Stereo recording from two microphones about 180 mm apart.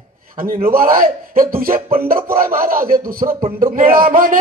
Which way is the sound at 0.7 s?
50° right (ahead or behind).